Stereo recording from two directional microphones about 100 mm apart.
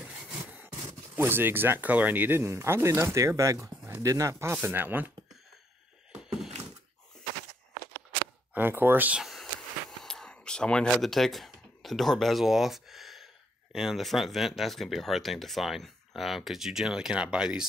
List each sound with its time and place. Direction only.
0.4 s sawing: 20° right (ahead or behind)
1.1 s speech: 20° right (ahead or behind)
8.5 s speech: 20° right (ahead or behind)
9.2 s speech: centre (ahead or behind)